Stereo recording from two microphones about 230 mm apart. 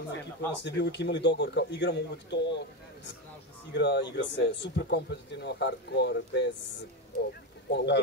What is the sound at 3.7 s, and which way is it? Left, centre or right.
Speech, left.